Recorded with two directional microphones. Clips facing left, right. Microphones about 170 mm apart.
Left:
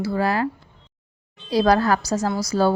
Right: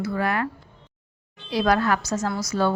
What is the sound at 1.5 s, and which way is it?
Speech, 35° left (ahead or behind).